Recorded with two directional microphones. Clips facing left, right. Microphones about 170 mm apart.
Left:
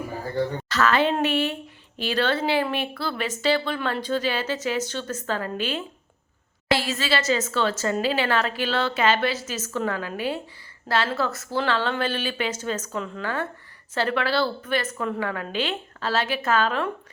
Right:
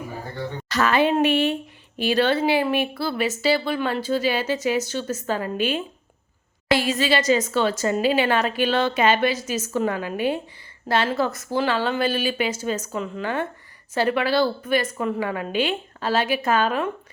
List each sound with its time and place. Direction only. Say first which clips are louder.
0.7 s a woman's voice: right 3 dB; 15° right (ahead or behind)